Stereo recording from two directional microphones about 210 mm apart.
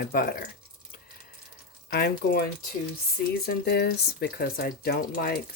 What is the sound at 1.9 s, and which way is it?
Speech, 50° left (ahead or behind).